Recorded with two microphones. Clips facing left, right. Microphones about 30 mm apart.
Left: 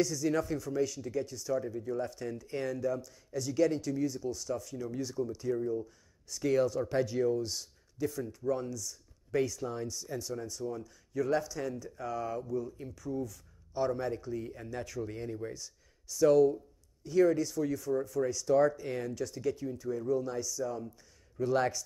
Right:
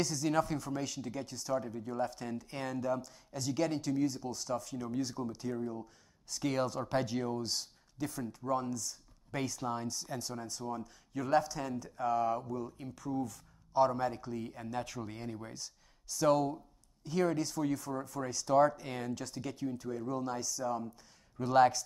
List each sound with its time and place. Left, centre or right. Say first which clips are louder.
0.0 s speech: left 2 dB; right